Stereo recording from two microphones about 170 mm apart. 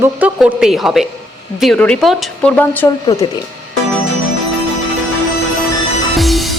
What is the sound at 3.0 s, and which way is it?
Speech, 25° left (ahead or behind).